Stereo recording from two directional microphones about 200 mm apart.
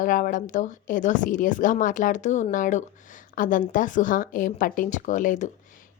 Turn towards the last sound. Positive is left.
turn(degrees=40)  # may be behind; listen again after turning